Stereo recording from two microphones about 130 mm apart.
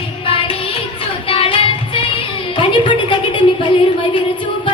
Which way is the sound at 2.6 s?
40° left (ahead or behind).